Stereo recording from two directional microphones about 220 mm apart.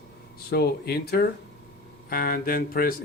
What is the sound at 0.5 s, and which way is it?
Speech, 45° left (ahead or behind).